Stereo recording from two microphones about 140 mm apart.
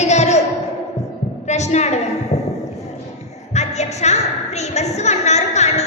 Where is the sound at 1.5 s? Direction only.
55° left (ahead or behind).